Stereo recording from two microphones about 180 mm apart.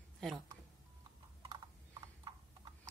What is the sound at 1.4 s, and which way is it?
Clip-clop, 25° right (ahead or behind).